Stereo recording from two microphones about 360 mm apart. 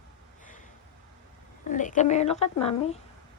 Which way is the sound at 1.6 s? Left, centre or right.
Left.